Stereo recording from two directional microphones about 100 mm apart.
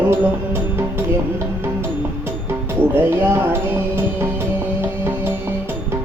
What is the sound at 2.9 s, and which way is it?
Music, 20° right (ahead or behind).